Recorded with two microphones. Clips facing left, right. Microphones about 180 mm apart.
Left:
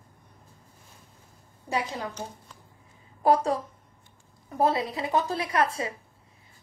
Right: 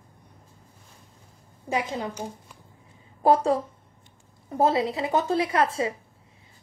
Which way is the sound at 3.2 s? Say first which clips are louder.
Right 2 dB; 25° right (ahead or behind).